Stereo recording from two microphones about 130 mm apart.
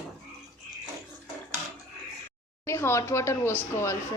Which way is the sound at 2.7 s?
20° left (ahead or behind).